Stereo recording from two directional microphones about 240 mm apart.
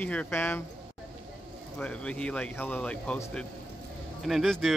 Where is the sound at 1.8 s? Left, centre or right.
Centre.